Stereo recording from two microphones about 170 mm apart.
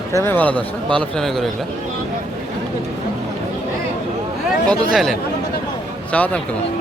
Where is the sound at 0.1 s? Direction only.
15° left (ahead or behind).